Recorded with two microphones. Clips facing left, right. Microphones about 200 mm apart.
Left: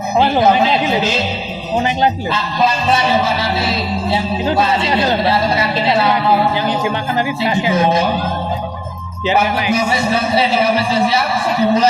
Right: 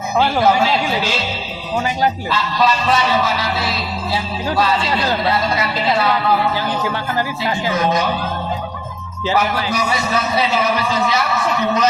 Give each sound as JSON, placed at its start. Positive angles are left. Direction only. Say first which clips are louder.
{"t": 0.2, "sound": "speech", "louder": "left 2 dB", "side_deg": 20}
{"t": 9.2, "sound": "speech", "louder": "left 3 dB", "side_deg": 20}